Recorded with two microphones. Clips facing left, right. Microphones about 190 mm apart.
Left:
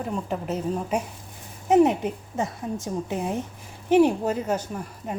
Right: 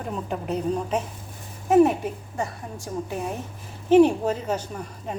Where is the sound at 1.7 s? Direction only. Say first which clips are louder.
Right 1 dB; 20° left (ahead or behind).